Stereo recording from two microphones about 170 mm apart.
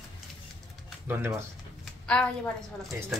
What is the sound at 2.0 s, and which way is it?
Speech, 5° left (ahead or behind).